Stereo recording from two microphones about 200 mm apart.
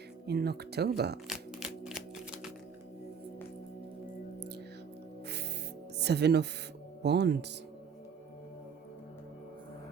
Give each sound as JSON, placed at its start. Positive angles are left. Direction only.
{"t": 0.3, "sound": "speech", "side_deg": -55}
{"t": 1.3, "sound": "music", "side_deg": -5}
{"t": 4.4, "sound": "music", "side_deg": -55}
{"t": 6.0, "sound": "speech", "side_deg": -55}